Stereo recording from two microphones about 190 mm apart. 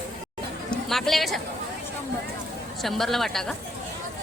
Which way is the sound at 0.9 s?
Centre (ahead or behind).